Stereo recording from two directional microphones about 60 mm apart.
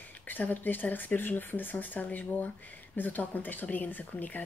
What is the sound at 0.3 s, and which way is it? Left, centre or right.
Speech, left.